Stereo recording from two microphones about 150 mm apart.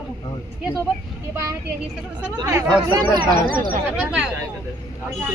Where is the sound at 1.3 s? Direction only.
15° right (ahead or behind).